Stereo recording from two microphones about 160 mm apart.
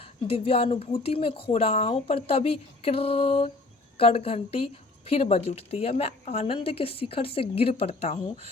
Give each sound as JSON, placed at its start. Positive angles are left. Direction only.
{"t": 0.0, "sound": "a woman's voice", "side_deg": 35}